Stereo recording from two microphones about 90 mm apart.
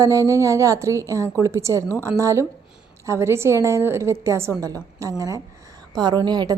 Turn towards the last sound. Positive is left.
turn(degrees=-50)  # may be behind; listen again after turning